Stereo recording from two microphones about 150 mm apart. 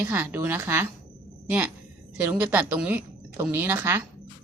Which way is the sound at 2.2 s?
10° right (ahead or behind).